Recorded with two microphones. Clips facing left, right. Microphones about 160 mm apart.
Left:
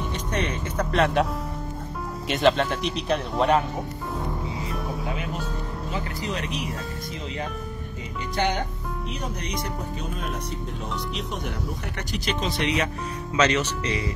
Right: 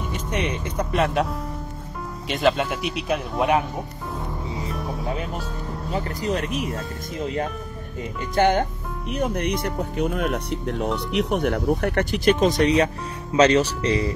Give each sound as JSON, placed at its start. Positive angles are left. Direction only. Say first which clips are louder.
{"t": 0.3, "sound": "speech", "louder": "right 2 dB", "side_deg": -10}
{"t": 4.6, "sound": "music", "louder": "right 1 dB", "side_deg": 0}
{"t": 5.9, "sound": "speech", "louder": "right 6 dB", "side_deg": -40}
{"t": 8.4, "sound": "speech", "louder": "right 7 dB", "side_deg": -50}